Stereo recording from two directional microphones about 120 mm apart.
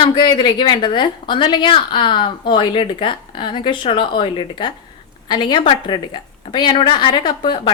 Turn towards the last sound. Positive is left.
turn(degrees=40)  # may be behind; listen again after turning